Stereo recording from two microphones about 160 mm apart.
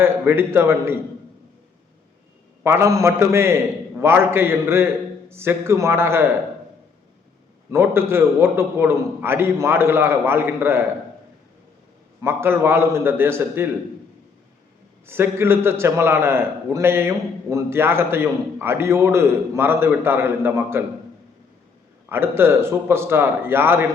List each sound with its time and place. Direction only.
0.0 s a man's voice: 15° right (ahead or behind)
2.6 s a man's voice: 15° right (ahead or behind)
7.7 s a man's voice: 15° right (ahead or behind)
12.2 s a man's voice: 15° right (ahead or behind)
15.0 s a man's voice: 15° right (ahead or behind)
22.1 s a man's voice: 15° right (ahead or behind)